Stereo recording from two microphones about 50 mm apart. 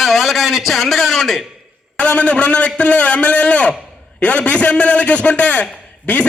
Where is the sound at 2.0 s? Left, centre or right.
Left.